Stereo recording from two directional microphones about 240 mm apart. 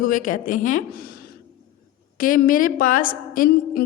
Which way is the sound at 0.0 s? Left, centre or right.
Left.